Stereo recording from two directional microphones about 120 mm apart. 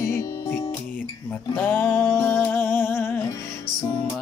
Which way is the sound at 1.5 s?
15° left (ahead or behind).